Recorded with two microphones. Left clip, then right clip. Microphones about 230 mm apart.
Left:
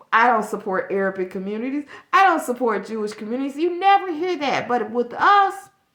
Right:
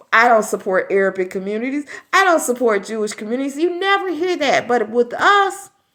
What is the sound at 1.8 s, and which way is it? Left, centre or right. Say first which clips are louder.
Speech: right 5 dB; left.